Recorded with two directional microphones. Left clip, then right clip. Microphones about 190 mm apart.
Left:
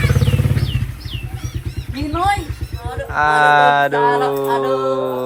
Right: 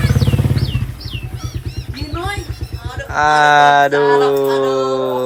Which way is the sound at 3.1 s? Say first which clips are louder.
Right 2 dB; centre (ahead or behind).